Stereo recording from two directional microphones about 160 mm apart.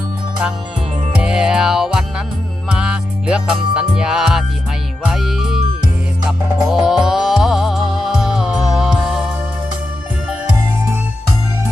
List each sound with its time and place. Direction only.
1.2 s music: 5° right (ahead or behind)
6.7 s music: centre (ahead or behind)